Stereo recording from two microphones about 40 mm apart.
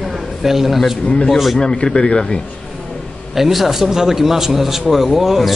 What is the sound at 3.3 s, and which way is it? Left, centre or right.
A man's voice, centre.